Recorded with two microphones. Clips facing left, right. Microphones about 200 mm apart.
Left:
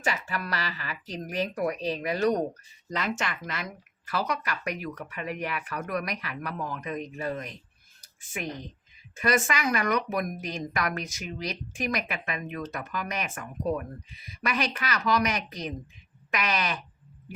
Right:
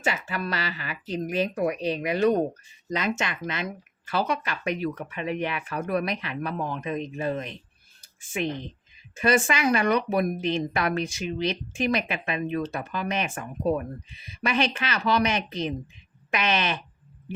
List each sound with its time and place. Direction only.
0.0 s a woman's voice: 25° right (ahead or behind)